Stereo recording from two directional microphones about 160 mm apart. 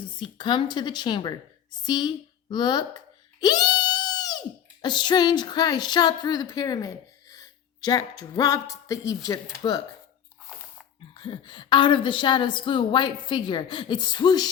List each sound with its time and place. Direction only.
0.2 s a woman's voice: 30° left (ahead or behind)
11.1 s a woman's voice: 30° left (ahead or behind)